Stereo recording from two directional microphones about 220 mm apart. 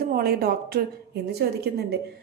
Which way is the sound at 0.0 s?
40° right (ahead or behind).